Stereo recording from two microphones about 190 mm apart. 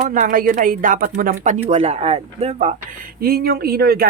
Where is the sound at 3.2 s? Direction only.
55° right (ahead or behind).